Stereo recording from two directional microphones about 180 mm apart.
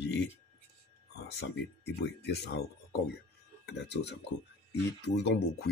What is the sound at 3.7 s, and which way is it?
Speech, 70° left (ahead or behind).